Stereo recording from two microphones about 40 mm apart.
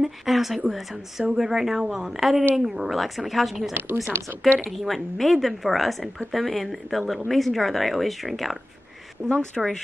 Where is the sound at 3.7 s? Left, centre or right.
Right.